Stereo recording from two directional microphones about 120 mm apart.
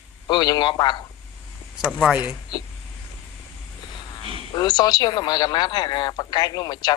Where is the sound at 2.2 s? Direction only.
35° left (ahead or behind).